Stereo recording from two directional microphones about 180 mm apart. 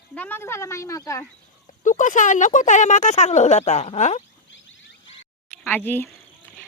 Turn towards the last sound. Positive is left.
turn(degrees=10)  # may be behind; listen again after turning